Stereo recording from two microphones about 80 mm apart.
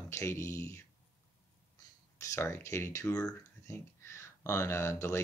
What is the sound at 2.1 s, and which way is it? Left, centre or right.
Speech, left.